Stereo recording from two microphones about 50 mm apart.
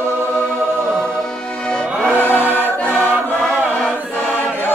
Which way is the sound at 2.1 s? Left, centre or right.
Left.